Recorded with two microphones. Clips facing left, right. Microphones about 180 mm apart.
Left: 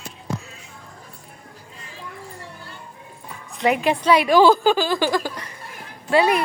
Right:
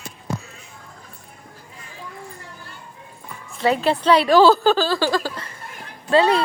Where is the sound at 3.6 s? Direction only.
15° left (ahead or behind).